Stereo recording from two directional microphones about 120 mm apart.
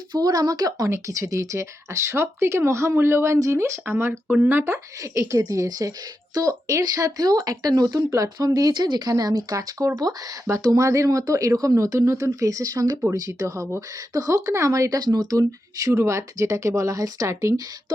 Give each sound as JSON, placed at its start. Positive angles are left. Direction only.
{"t": 0.1, "sound": "speech", "side_deg": -30}